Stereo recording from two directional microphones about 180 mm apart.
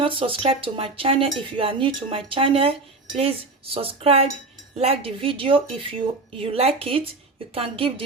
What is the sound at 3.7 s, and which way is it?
Speech, 30° right (ahead or behind).